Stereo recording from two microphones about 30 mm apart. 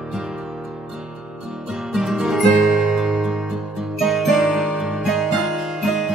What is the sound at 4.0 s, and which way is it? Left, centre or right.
Music, centre.